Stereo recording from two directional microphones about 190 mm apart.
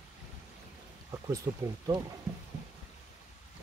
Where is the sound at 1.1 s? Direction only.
20° right (ahead or behind).